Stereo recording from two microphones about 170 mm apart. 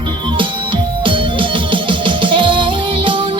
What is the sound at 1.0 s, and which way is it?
Music, 30° right (ahead or behind).